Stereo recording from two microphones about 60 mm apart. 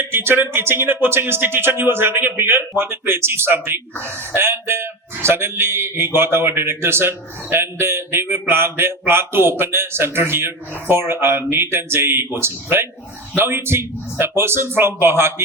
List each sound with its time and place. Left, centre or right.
0.0 s a man's voice: right